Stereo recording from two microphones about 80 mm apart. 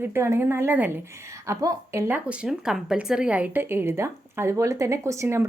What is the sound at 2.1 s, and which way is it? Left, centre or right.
A woman's voice, centre.